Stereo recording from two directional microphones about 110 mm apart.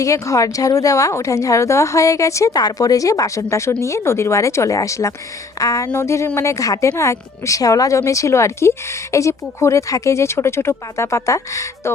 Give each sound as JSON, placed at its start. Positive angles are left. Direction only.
{"t": 0.0, "sound": "speech", "side_deg": 30}